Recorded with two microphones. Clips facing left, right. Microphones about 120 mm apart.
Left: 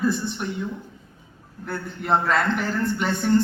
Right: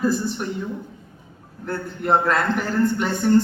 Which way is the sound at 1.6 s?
Centre (ahead or behind).